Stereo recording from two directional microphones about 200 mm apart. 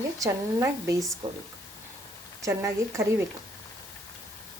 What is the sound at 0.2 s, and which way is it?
Speech, 15° right (ahead or behind).